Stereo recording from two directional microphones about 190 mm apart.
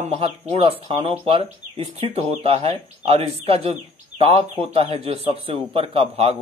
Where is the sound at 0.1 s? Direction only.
30° right (ahead or behind).